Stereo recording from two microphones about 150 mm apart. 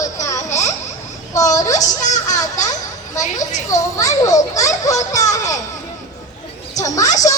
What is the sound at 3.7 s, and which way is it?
Children playing, 20° left (ahead or behind).